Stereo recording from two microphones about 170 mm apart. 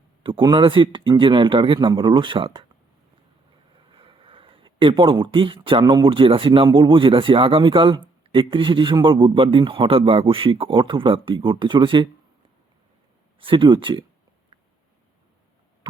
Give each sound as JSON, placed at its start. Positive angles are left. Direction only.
{"t": 0.2, "sound": "a man's voice", "side_deg": -30}
{"t": 3.9, "sound": "a sound", "side_deg": -30}
{"t": 5.6, "sound": "a man's voice", "side_deg": -25}
{"t": 13.4, "sound": "a man's voice", "side_deg": -30}